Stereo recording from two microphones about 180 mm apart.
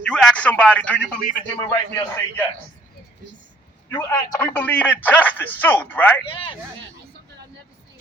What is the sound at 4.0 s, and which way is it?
Speech, 10° left (ahead or behind).